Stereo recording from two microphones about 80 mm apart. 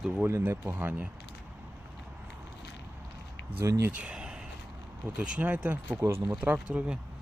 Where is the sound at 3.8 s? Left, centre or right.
Centre.